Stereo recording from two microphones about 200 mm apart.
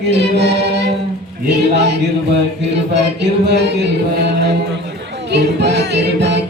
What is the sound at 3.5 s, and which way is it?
Chant, 55° right (ahead or behind).